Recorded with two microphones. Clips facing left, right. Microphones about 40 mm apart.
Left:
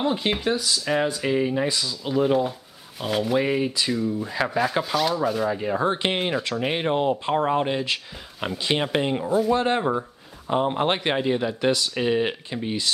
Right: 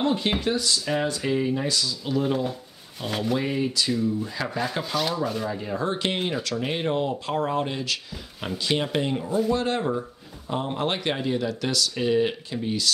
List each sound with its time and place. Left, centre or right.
0.0 s speech: centre
1.4 s speech: left
4.6 s rub: centre
5.5 s speech: left